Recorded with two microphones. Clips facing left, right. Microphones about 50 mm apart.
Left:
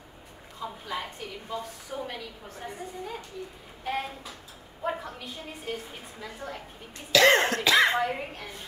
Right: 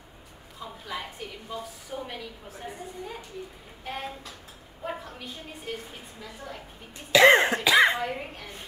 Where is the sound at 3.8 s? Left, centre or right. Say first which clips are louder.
Left 4 dB; centre.